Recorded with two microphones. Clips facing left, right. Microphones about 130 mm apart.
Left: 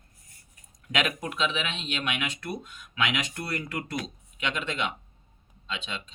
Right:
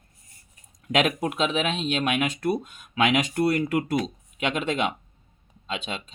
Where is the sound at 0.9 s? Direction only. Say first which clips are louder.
Right 6 dB; 45° right (ahead or behind).